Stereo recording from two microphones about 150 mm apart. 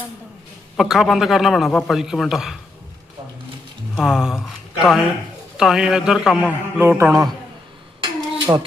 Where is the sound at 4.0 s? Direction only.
5° right (ahead or behind).